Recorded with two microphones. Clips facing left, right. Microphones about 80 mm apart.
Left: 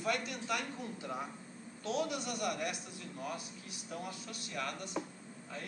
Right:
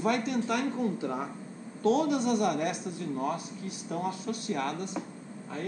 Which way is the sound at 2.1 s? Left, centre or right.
Right.